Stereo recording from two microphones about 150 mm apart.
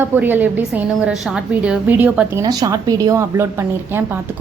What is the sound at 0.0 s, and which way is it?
A woman's voice, 15° right (ahead or behind).